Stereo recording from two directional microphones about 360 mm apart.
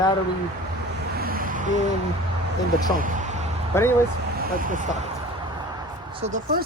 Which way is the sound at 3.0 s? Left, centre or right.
Right.